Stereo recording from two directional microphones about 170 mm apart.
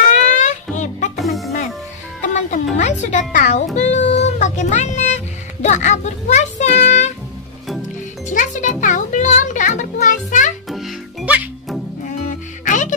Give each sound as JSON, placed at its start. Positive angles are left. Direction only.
{"t": 0.1, "sound": "music", "side_deg": 45}
{"t": 1.1, "sound": "music", "side_deg": 0}
{"t": 2.2, "sound": "music", "side_deg": 45}
{"t": 2.8, "sound": "speech", "side_deg": 45}
{"t": 8.3, "sound": "music", "side_deg": 50}
{"t": 10.7, "sound": "music", "side_deg": 0}
{"t": 12.3, "sound": "music", "side_deg": 50}